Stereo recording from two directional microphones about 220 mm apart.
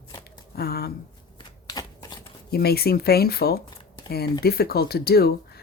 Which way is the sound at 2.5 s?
45° left (ahead or behind).